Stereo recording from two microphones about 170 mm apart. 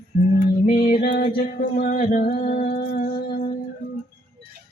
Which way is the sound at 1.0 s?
60° left (ahead or behind).